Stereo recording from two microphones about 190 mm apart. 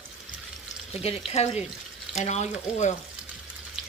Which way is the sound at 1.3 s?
35° left (ahead or behind).